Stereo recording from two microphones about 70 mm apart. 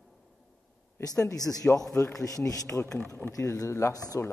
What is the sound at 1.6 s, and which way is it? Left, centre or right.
Speech, left.